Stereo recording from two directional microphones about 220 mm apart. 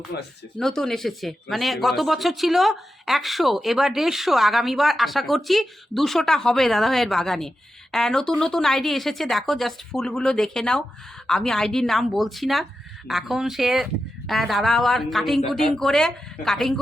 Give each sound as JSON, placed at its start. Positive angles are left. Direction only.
{"t": 0.1, "sound": "speech", "side_deg": 50}
{"t": 0.6, "sound": "speech", "side_deg": 0}